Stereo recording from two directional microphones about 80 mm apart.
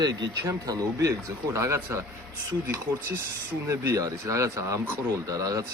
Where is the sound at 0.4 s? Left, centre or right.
Right.